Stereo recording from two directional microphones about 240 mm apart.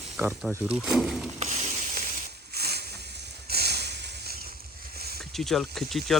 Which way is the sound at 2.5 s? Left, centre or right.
Right.